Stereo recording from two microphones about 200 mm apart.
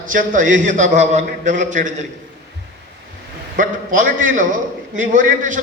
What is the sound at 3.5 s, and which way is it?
A man's voice, 40° right (ahead or behind).